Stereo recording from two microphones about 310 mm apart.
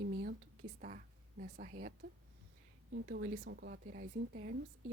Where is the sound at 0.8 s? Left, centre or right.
Right.